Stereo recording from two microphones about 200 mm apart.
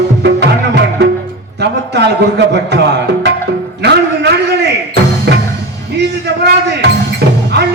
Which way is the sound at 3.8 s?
55° right (ahead or behind).